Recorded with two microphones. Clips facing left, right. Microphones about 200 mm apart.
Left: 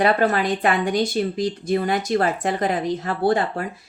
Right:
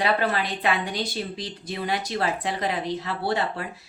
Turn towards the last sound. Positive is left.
turn(degrees=45)  # may be behind; listen again after turning